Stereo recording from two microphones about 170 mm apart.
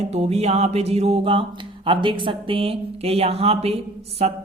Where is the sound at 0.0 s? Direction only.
40° right (ahead or behind).